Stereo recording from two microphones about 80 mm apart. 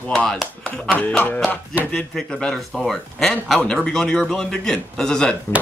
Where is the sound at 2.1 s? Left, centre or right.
Centre.